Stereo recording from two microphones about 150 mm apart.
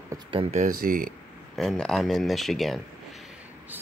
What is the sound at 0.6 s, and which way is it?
Speech, 70° right (ahead or behind).